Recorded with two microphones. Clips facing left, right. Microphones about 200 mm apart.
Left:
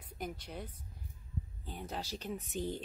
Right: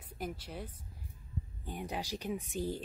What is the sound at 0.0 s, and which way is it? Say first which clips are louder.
Speech: right 1 dB; 5° right (ahead or behind).